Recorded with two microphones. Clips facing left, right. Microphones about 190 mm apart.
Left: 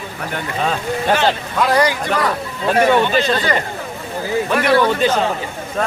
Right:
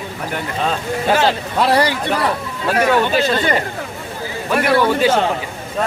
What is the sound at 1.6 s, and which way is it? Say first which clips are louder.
Speech: even; 30° right (ahead or behind).